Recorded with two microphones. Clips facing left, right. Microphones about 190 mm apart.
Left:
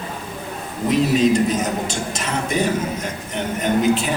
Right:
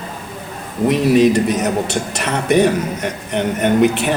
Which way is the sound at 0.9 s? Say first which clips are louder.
Right 3 dB; 65° right (ahead or behind).